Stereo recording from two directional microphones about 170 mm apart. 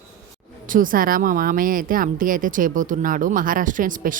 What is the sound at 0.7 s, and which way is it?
Speech, 55° right (ahead or behind).